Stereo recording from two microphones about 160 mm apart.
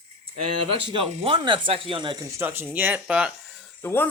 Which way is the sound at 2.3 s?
15° right (ahead or behind).